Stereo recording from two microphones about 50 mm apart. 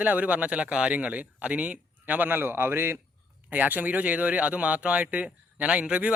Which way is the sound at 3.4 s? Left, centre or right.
Right.